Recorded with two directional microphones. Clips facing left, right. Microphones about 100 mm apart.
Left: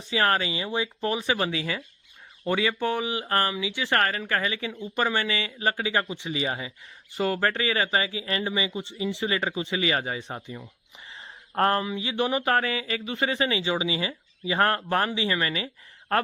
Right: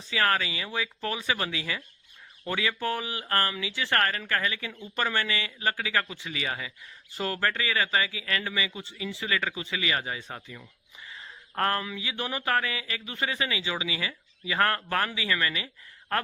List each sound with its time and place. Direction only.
0.1 s speech: 25° left (ahead or behind)